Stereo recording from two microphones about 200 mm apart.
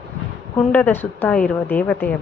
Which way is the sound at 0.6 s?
10° left (ahead or behind).